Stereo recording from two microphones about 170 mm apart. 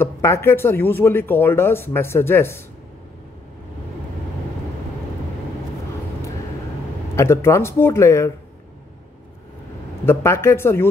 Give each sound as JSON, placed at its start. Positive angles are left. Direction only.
{"t": 0.0, "sound": "speech", "side_deg": 15}
{"t": 7.2, "sound": "speech", "side_deg": 15}
{"t": 10.0, "sound": "speech", "side_deg": 15}